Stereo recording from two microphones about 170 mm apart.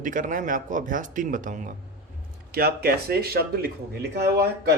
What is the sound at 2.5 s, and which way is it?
Speech, 65° right (ahead or behind).